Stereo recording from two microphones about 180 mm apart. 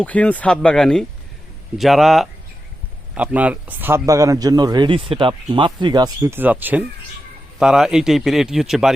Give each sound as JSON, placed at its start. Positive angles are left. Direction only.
{"t": 0.0, "sound": "speech", "side_deg": 10}